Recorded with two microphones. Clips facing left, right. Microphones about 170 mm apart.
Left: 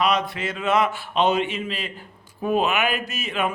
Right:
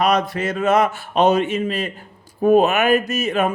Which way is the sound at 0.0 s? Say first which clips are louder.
Right 4 dB; 45° right (ahead or behind).